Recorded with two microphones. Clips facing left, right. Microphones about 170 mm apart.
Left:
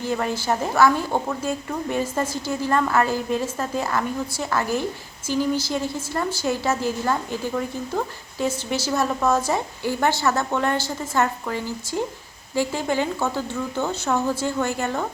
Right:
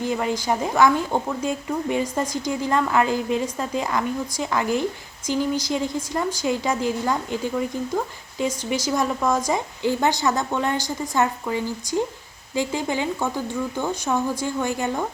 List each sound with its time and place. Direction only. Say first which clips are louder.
0.0 s a woman's voice: right 1 dB; 15° right (ahead or behind)